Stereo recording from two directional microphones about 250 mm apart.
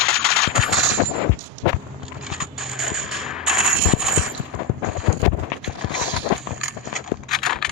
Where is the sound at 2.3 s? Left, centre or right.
Centre.